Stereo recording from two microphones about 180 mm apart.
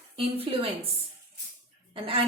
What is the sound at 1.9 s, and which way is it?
Speech, 30° right (ahead or behind).